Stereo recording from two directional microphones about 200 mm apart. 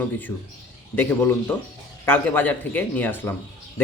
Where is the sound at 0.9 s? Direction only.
10° left (ahead or behind).